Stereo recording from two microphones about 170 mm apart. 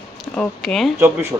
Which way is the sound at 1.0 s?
15° right (ahead or behind).